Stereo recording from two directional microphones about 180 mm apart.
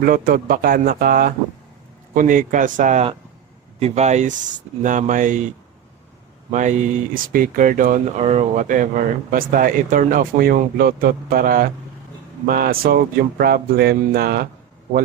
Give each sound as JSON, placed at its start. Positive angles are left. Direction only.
{"t": 0.0, "sound": "speech", "side_deg": -50}